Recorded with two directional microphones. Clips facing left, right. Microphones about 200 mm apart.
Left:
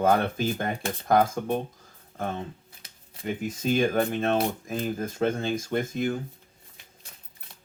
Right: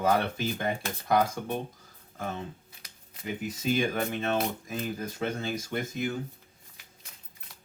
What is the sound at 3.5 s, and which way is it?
Speech, 50° left (ahead or behind).